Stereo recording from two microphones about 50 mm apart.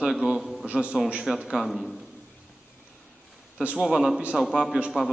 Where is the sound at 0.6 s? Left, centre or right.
Right.